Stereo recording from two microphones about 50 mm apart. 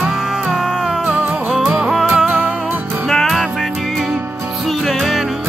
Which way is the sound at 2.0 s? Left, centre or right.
Right.